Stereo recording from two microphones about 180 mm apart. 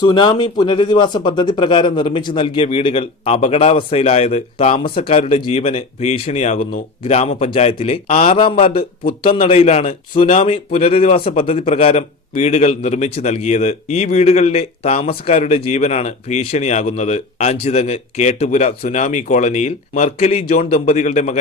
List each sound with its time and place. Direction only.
0.0 s a man's voice: 25° left (ahead or behind)